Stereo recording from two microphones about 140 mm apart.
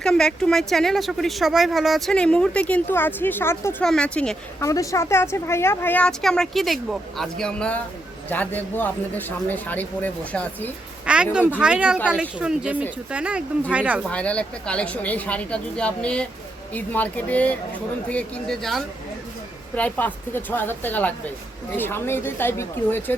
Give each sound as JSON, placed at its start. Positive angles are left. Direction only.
{"t": 0.0, "sound": "speech", "side_deg": 5}
{"t": 4.6, "sound": "speech", "side_deg": 25}
{"t": 11.0, "sound": "speech", "side_deg": -5}
{"t": 14.0, "sound": "speech", "side_deg": 10}